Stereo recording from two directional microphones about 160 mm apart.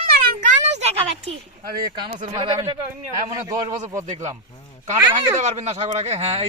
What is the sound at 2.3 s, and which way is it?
Speech, 25° right (ahead or behind).